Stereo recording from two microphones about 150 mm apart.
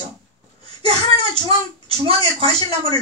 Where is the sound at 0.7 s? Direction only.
40° right (ahead or behind).